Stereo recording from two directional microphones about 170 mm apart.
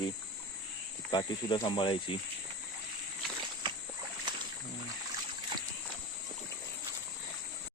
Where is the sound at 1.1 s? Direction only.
25° left (ahead or behind).